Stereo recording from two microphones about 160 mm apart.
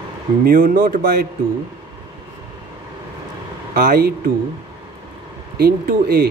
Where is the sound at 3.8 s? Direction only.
70° right (ahead or behind).